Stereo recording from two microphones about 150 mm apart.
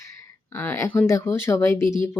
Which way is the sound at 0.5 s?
15° left (ahead or behind).